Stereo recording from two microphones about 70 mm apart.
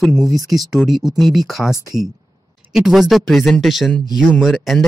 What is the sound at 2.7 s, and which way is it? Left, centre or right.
Speech, centre.